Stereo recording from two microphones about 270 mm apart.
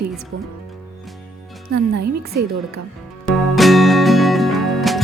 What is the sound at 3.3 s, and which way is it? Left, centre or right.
Music, centre.